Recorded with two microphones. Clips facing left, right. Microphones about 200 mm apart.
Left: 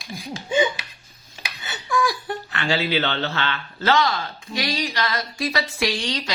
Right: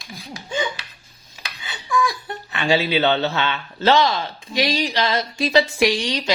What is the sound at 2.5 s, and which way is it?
Speech, 15° right (ahead or behind).